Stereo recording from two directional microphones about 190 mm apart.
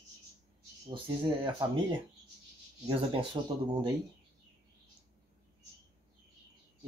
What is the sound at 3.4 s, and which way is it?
Speech, 20° right (ahead or behind).